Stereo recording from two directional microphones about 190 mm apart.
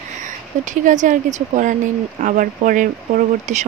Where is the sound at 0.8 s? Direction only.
40° right (ahead or behind).